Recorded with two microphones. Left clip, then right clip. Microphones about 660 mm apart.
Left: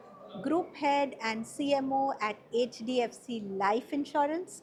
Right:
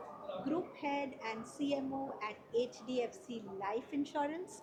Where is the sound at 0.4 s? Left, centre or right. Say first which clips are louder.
Left 10 dB; left.